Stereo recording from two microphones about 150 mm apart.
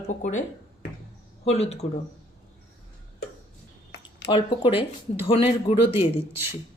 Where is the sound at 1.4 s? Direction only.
45° left (ahead or behind).